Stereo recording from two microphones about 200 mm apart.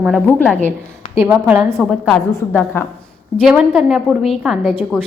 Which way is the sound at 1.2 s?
10° right (ahead or behind).